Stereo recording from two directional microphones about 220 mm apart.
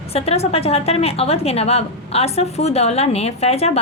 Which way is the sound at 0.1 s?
25° left (ahead or behind).